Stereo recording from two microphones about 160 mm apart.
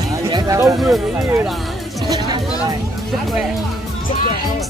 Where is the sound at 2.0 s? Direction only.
25° right (ahead or behind).